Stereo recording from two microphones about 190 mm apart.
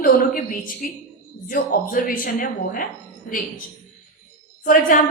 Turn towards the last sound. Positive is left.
turn(degrees=45)  # may be behind; listen again after turning